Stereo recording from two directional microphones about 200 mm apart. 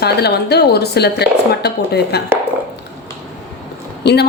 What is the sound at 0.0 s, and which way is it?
A woman's voice, 55° left (ahead or behind).